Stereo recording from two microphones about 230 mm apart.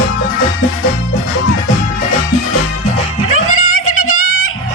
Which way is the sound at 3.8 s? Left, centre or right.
Left.